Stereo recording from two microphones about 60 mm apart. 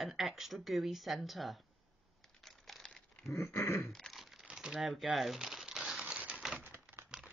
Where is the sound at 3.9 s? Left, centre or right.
Centre.